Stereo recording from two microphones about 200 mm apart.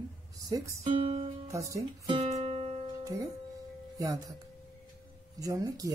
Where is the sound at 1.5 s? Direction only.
15° right (ahead or behind).